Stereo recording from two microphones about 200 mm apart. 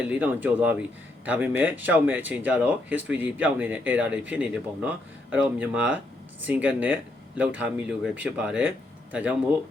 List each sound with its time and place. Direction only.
0.0 s speech: 5° right (ahead or behind)